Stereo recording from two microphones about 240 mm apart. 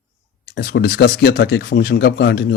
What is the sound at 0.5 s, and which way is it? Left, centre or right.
Speech, left.